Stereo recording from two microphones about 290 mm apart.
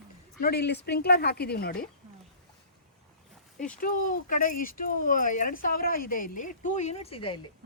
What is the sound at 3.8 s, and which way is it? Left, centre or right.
Speech, left.